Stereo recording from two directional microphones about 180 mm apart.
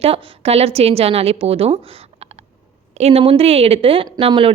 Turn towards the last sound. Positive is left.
turn(degrees=-30)  # may be behind; listen again after turning